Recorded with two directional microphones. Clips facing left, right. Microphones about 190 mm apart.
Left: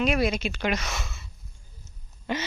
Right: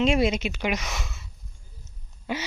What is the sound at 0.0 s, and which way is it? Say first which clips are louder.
Speech: right 2 dB; 25° right (ahead or behind).